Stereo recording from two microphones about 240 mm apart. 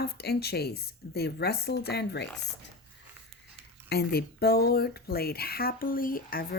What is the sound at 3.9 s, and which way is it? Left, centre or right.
Speech, left.